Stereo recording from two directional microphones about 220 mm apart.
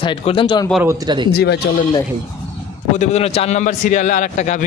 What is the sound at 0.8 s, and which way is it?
Speech, 20° right (ahead or behind).